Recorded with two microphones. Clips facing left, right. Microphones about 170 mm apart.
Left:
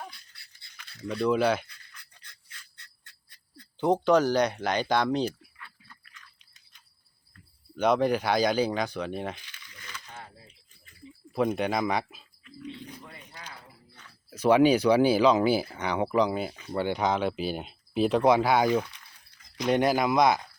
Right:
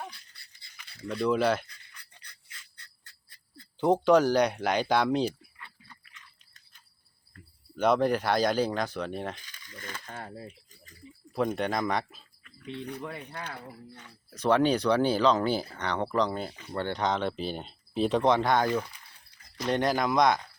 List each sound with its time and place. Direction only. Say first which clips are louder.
1.0 s speech: left 1 dB; centre (ahead or behind)
2.0 s a sound: even; centre (ahead or behind)
3.8 s speech: right 1 dB; centre (ahead or behind)
7.8 s speech: left 1 dB; centre (ahead or behind)
9.4 s a sound: right 6 dB; 45° right (ahead or behind)
11.3 s speech: left 2 dB; centre (ahead or behind)
12.5 s speech: right 3 dB; 65° right (ahead or behind)
14.3 s speech: left 4 dB; 5° left (ahead or behind)